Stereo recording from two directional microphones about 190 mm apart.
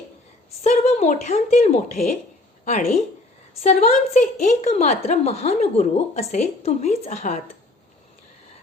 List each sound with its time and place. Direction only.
0.6 s a woman's voice: 35° left (ahead or behind)
3.6 s a woman's voice: 35° left (ahead or behind)